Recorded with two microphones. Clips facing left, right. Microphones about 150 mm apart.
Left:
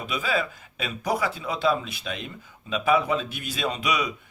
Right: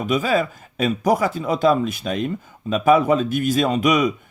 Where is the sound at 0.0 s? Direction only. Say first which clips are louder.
Right 8 dB; 45° right (ahead or behind).